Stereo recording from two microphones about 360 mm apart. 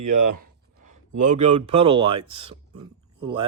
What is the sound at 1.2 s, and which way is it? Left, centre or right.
Speech, centre.